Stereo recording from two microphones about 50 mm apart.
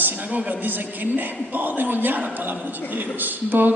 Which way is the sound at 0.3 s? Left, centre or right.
Right.